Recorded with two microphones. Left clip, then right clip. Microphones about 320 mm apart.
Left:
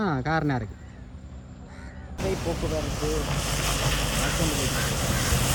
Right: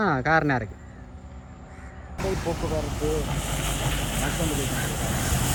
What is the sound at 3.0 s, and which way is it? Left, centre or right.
Vehicle, centre.